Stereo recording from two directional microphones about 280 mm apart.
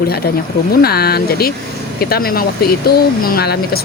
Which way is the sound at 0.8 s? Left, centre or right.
Left.